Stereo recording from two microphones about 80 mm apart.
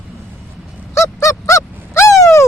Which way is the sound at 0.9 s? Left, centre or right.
Left.